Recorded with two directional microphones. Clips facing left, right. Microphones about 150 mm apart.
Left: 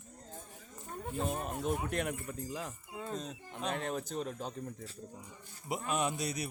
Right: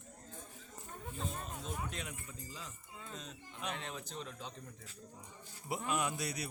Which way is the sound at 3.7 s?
50° left (ahead or behind).